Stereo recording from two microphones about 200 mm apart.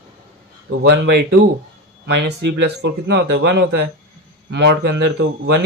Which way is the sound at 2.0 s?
55° right (ahead or behind).